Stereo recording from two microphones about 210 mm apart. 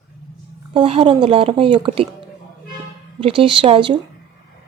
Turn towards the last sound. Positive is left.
turn(degrees=-25)  # may be behind; listen again after turning